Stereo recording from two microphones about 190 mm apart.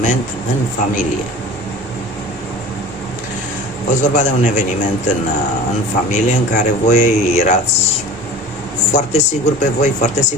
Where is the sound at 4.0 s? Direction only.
40° left (ahead or behind).